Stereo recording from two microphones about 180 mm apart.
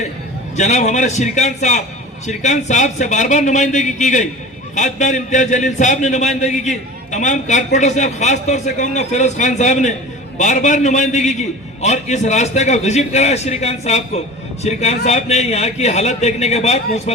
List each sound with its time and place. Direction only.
0.5 s a man's voice: 40° left (ahead or behind)